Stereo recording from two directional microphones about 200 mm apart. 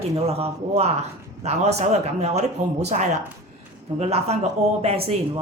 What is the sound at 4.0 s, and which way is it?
Speech, 30° right (ahead or behind).